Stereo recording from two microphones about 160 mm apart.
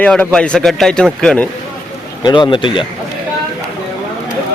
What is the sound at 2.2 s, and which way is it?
Speech, 30° left (ahead or behind).